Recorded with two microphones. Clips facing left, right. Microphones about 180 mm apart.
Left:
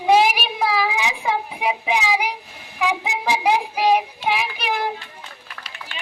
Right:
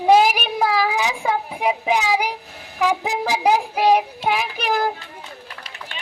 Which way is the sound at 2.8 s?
45° right (ahead or behind).